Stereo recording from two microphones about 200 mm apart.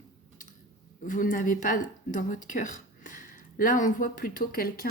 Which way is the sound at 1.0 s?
40° left (ahead or behind).